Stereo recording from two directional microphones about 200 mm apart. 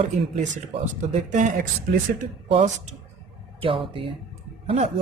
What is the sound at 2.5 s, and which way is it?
Speech, 25° right (ahead or behind).